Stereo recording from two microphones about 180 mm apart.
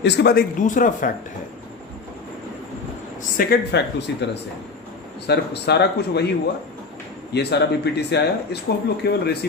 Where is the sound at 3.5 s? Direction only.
70° left (ahead or behind).